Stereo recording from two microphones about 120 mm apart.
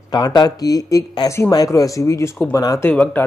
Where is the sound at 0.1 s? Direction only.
35° left (ahead or behind).